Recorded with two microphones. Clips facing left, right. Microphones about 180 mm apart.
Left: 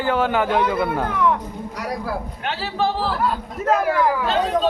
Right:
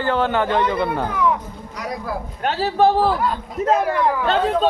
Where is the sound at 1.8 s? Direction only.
5° left (ahead or behind).